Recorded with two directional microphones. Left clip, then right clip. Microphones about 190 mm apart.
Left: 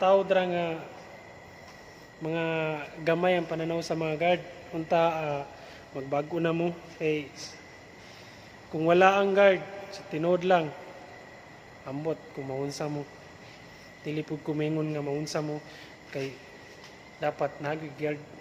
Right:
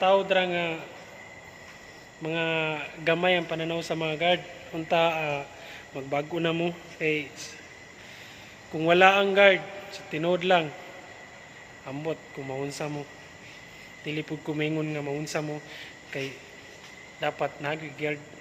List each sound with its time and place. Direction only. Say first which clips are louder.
0.0 s speech: right 1 dB; centre (ahead or behind)
2.2 s speech: right 2 dB; centre (ahead or behind)
8.7 s speech: right 2 dB; 5° right (ahead or behind)
11.9 s speech: even; centre (ahead or behind)
14.0 s speech: right 1 dB; centre (ahead or behind)